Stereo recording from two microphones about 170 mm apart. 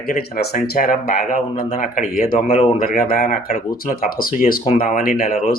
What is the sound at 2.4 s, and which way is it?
Speech, 35° left (ahead or behind).